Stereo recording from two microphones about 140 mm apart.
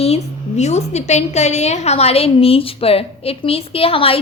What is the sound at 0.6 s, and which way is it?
A woman's voice, 55° left (ahead or behind).